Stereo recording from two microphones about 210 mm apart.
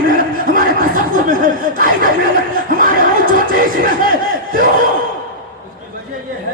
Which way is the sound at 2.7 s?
40° right (ahead or behind).